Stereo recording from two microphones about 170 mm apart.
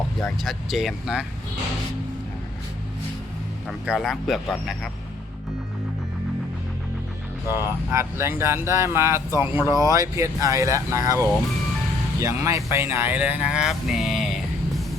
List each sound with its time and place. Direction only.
0.4 s speech: centre (ahead or behind)
3.7 s speech: centre (ahead or behind)
7.9 s speech: 15° right (ahead or behind)